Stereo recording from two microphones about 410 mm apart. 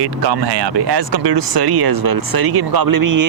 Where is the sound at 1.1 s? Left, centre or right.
Right.